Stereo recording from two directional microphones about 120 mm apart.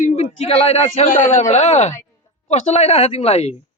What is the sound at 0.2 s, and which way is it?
A man's voice, 60° left (ahead or behind).